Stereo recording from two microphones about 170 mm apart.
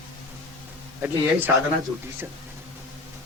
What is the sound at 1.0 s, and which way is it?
Speech, 15° right (ahead or behind).